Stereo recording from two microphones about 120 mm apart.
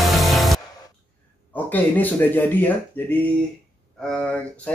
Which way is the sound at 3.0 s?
15° left (ahead or behind).